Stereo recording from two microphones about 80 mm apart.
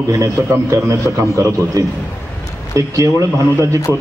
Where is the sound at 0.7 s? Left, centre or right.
Right.